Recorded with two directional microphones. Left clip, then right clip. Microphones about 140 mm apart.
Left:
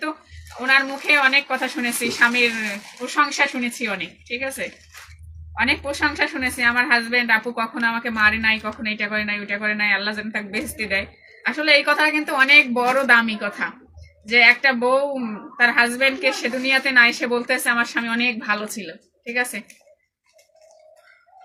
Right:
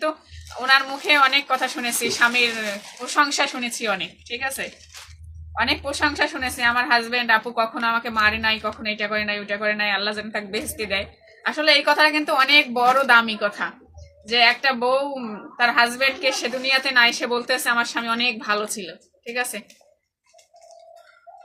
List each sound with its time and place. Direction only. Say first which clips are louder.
0.7 s a woman's voice: left 1 dB; 40° right (ahead or behind)
5.5 s a woman's voice: left 1 dB; 35° right (ahead or behind)